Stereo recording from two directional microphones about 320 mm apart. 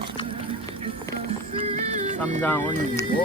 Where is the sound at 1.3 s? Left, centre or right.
Centre.